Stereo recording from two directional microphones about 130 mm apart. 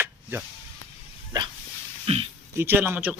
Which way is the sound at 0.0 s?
20° right (ahead or behind).